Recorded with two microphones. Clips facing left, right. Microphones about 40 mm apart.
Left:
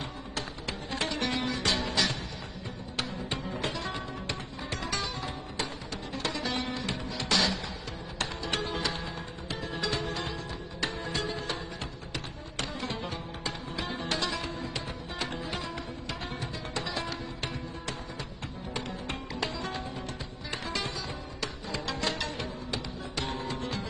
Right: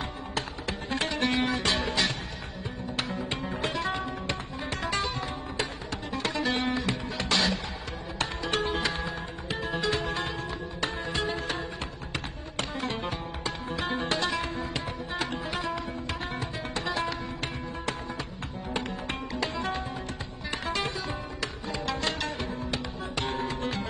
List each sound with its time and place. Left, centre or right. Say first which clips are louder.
0.3 s music: right 4 dB; right
18.7 s music: right 4 dB; right